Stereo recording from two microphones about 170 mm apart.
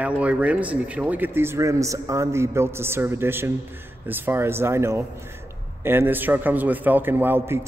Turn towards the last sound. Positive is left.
turn(degrees=-15)  # may be behind; listen again after turning